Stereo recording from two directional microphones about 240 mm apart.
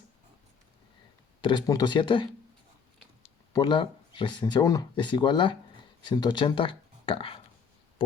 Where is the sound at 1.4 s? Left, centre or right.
Centre.